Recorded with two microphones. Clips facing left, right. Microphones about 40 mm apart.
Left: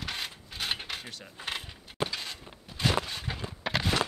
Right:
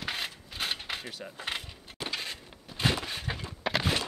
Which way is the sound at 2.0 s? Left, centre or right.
Left.